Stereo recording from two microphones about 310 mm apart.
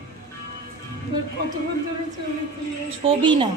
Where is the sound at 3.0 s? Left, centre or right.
Centre.